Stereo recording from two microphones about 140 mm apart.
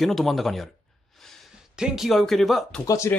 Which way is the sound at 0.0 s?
Centre (ahead or behind).